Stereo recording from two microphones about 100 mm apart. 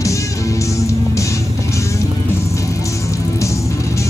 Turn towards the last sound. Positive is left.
turn(degrees=30)  # may be behind; listen again after turning